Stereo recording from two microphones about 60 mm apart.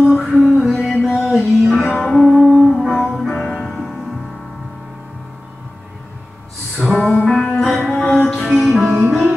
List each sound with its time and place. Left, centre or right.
0.0 s music: centre
0.3 s music: centre
0.7 s music: centre
6.8 s music: centre